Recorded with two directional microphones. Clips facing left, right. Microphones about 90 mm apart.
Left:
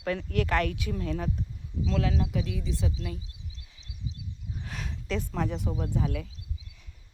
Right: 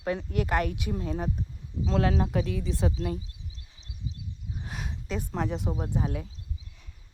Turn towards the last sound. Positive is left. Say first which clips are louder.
# even
turn(degrees=-35)  # may be behind; listen again after turning